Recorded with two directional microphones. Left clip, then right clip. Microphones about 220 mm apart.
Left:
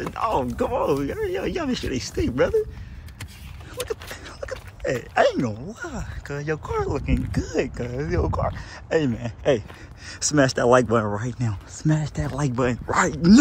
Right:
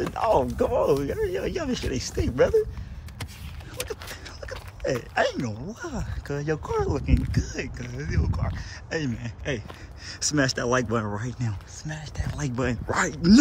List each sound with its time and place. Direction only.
0.1 s speech: 15° right (ahead or behind)
3.7 s a sound: 5° right (ahead or behind)
5.7 s speech: 15° right (ahead or behind)
7.2 s speech: centre (ahead or behind)
11.8 s speech: 15° left (ahead or behind)
12.4 s speech: 5° right (ahead or behind)